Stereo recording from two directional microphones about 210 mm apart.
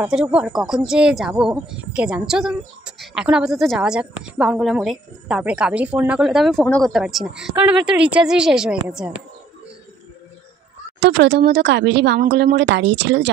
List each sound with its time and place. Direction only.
0.0 s speech: 5° right (ahead or behind)
11.0 s speech: 55° right (ahead or behind)